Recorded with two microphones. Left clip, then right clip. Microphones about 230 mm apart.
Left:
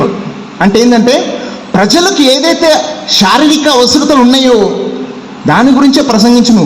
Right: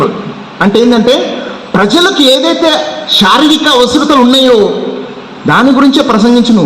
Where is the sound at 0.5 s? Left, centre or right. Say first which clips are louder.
Even; left.